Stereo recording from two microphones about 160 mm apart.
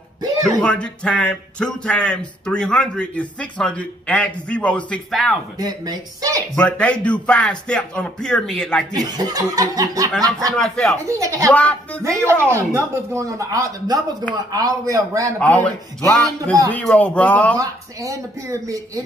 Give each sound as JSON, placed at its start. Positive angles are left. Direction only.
{"t": 0.6, "sound": "speech", "side_deg": 5}
{"t": 5.6, "sound": "speech", "side_deg": -25}
{"t": 6.5, "sound": "speech", "side_deg": 5}
{"t": 8.9, "sound": "speech", "side_deg": -25}
{"t": 10.5, "sound": "speech", "side_deg": 5}
{"t": 11.1, "sound": "speech", "side_deg": -20}
{"t": 11.5, "sound": "speech", "side_deg": 10}
{"t": 12.0, "sound": "speech", "side_deg": -15}
{"t": 15.3, "sound": "speech", "side_deg": 10}
{"t": 17.6, "sound": "speech", "side_deg": -20}